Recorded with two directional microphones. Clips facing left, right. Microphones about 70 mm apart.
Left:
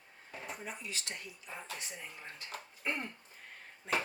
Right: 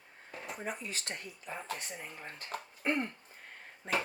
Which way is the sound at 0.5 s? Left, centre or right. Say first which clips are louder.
Right 8 dB; right.